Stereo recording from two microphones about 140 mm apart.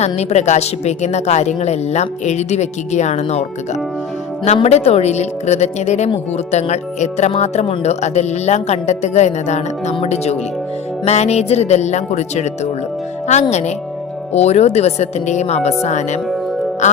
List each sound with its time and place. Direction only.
0.0 s speech: 50° left (ahead or behind)
4.4 s speech: 50° left (ahead or behind)
16.8 s music: 60° left (ahead or behind)